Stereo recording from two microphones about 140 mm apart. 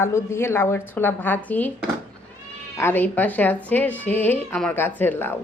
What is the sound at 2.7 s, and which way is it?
A woman's voice, 15° left (ahead or behind).